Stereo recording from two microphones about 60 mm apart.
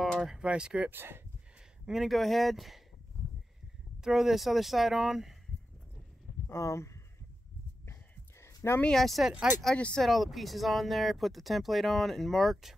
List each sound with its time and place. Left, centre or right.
0.0 s a sound: centre
0.3 s speech: centre
0.8 s speech: right
1.9 s speech: centre
4.0 s speech: centre
6.5 s speech: left
7.8 s a sound: left
8.8 s speech: centre
9.2 s speech: centre
9.8 s speech: centre
10.0 s speech: centre